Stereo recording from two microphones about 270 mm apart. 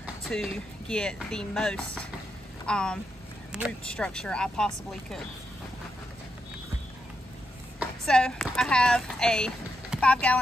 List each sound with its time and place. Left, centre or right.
0.0 s speech: centre
8.0 s speech: centre